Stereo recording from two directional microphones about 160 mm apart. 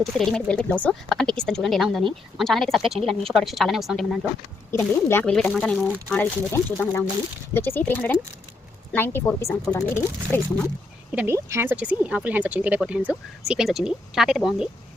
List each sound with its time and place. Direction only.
0.0 s speech: centre (ahead or behind)
4.7 s speech: 15° left (ahead or behind)
11.1 s speech: 10° right (ahead or behind)